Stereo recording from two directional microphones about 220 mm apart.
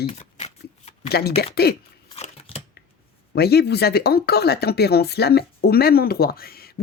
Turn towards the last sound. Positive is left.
turn(degrees=45)  # may be behind; listen again after turning